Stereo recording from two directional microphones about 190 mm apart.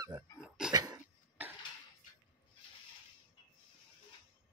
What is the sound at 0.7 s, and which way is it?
Cough, 20° right (ahead or behind).